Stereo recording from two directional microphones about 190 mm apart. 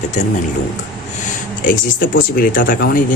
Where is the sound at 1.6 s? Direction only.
45° left (ahead or behind).